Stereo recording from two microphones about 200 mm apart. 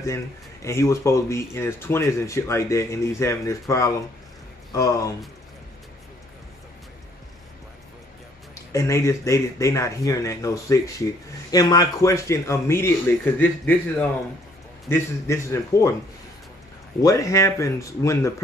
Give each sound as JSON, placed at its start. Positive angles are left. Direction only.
{"t": 0.0, "sound": "speech", "side_deg": 15}
{"t": 8.7, "sound": "speech", "side_deg": 15}
{"t": 17.0, "sound": "speech", "side_deg": 15}